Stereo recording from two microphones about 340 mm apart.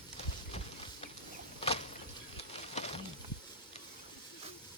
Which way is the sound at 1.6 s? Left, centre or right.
Centre.